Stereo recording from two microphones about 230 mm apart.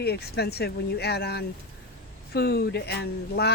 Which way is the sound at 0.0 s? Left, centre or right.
Left.